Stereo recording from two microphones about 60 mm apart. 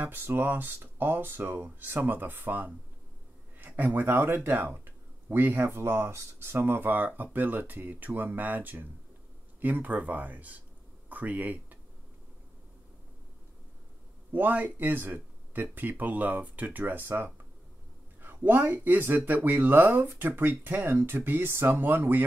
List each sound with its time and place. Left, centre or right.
0.0 s speech: right
4.6 s a sound: right
5.6 s speech: right
14.3 s speech: right